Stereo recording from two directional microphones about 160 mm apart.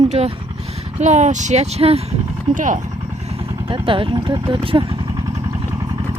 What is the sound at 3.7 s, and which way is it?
Speech, 35° right (ahead or behind).